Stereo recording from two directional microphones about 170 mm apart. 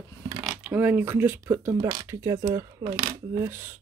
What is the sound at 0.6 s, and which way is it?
Speech, 10° right (ahead or behind).